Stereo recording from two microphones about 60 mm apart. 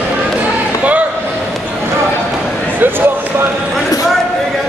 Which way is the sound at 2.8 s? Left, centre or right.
Right.